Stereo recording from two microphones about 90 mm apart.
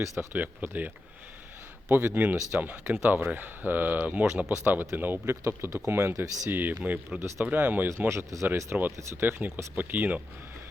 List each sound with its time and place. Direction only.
0.2 s speech: 20° right (ahead or behind)
1.9 s speech: 25° right (ahead or behind)
6.5 s speech: 20° right (ahead or behind)
7.2 s speech: 30° right (ahead or behind)
7.4 s speech: 20° right (ahead or behind)